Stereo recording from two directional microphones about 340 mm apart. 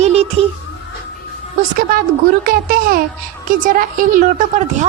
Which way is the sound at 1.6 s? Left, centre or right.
Right.